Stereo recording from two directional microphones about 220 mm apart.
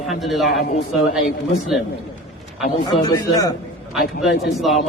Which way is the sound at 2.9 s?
15° left (ahead or behind).